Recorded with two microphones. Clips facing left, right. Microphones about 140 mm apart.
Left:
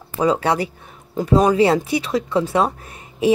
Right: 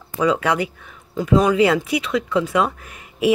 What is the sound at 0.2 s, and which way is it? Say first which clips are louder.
Speech: left 1 dB; 35° left (ahead or behind).